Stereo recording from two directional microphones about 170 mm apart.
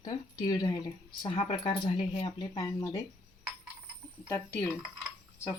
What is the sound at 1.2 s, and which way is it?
Speech, 30° left (ahead or behind).